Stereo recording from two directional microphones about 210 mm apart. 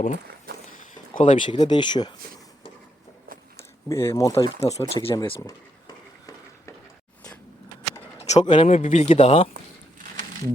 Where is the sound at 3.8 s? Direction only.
15° left (ahead or behind).